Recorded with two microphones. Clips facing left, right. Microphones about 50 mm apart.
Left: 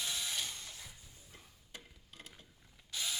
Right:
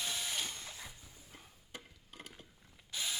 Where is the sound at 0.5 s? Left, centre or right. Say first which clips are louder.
Right 2 dB; right.